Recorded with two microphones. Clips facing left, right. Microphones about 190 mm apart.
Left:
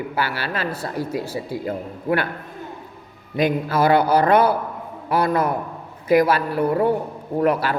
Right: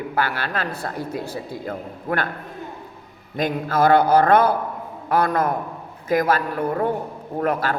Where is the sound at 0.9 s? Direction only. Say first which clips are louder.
Left 3 dB; 5° left (ahead or behind).